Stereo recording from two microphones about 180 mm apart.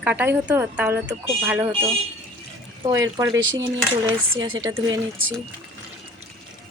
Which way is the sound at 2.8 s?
20° right (ahead or behind).